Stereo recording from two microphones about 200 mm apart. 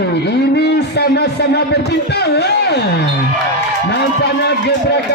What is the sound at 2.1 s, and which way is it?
Speech, 55° left (ahead or behind).